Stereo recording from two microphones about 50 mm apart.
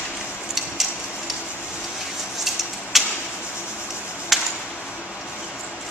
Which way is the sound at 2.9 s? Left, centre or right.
Centre.